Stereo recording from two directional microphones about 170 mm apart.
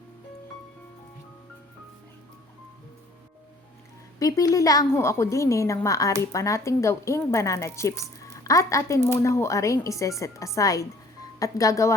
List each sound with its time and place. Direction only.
4.2 s a woman's voice: 20° left (ahead or behind)